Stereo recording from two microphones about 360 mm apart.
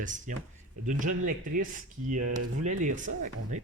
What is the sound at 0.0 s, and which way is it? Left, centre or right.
Speech, right.